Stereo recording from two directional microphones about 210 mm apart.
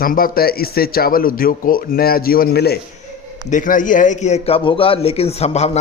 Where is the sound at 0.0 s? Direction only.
45° left (ahead or behind).